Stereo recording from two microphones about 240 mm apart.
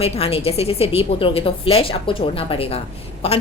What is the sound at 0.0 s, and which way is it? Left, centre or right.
A woman's voice, left.